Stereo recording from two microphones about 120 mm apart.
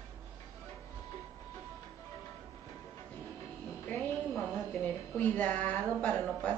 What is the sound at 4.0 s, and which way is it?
Music, centre (ahead or behind).